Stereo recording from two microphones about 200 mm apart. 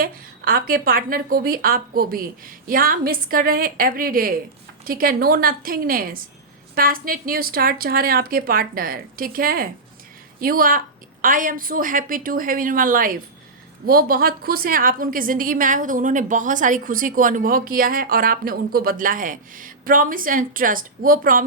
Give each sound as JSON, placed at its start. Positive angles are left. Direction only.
{"t": 0.0, "sound": "a woman's voice", "side_deg": -45}